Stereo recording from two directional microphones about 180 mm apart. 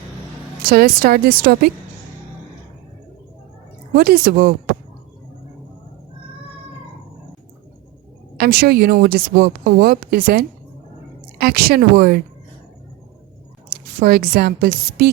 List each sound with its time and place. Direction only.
0.7 s speech: 55° right (ahead or behind)
3.9 s speech: 55° right (ahead or behind)
8.4 s speech: 60° right (ahead or behind)
14.0 s speech: 55° right (ahead or behind)